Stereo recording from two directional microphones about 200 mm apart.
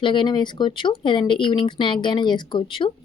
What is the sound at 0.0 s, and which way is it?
Speech, 25° left (ahead or behind).